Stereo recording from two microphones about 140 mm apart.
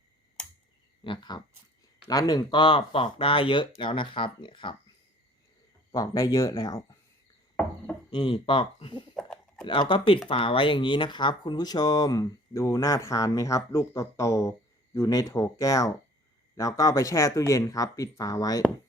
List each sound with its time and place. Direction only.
1.0 s speech: 35° left (ahead or behind)
5.9 s speech: 25° left (ahead or behind)
8.1 s speech: 35° left (ahead or behind)
9.1 s a sound: 5° left (ahead or behind)
10.2 s speech: 40° left (ahead or behind)